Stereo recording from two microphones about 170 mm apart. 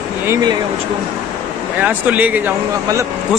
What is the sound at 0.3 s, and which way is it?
Speech, 25° right (ahead or behind).